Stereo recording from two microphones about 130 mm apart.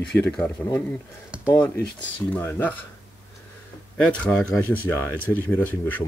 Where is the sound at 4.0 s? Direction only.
5° left (ahead or behind).